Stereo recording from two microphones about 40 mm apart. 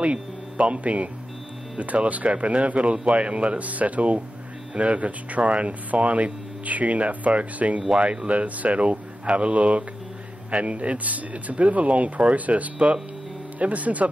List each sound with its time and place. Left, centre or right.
0.0 s speech: right